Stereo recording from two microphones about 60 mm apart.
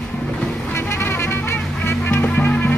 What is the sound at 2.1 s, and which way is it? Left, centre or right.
Music, left.